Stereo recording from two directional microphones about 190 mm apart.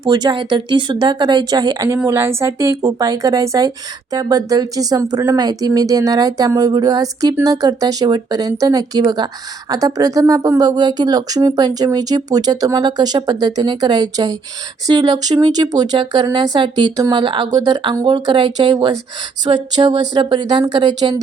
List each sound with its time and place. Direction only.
0.0 s a woman's voice: 20° right (ahead or behind)